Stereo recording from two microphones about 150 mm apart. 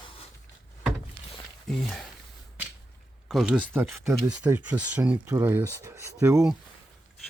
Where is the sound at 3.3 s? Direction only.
5° right (ahead or behind).